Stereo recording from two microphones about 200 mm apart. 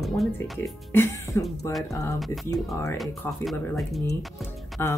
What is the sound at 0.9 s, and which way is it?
Speech, 15° left (ahead or behind).